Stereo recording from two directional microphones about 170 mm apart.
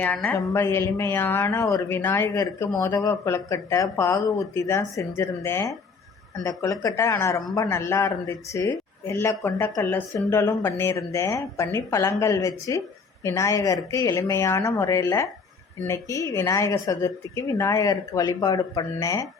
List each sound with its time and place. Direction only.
0.0 s a woman's voice: 10° left (ahead or behind)